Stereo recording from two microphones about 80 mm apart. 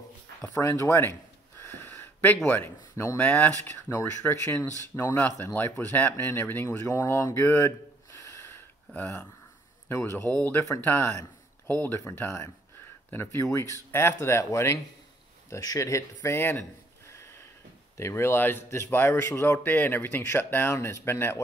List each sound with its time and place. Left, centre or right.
0.7 s speech: left
1.6 s a sound: left
2.3 s speech: left
7.5 s a sound: left
9.8 s speech: left
11.0 s speech: left
11.6 s speech: left
17.1 s a sound: left
17.9 s speech: left